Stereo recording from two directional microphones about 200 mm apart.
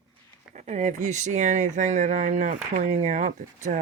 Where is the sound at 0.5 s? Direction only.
35° right (ahead or behind).